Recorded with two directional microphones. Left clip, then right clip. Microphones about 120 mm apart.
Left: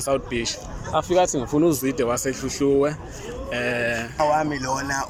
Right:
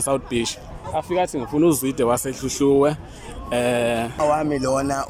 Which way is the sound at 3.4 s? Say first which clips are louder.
Right 4 dB; 35° right (ahead or behind).